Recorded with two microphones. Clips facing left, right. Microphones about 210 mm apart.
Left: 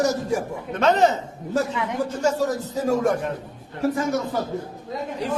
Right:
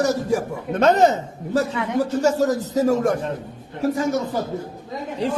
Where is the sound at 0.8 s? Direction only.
45° right (ahead or behind).